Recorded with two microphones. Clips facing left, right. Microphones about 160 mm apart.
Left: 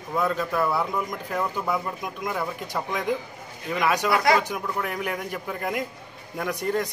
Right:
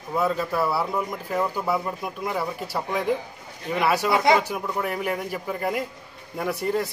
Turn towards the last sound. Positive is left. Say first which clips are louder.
# right 1 dB
turn(degrees=-5)  # may be behind; listen again after turning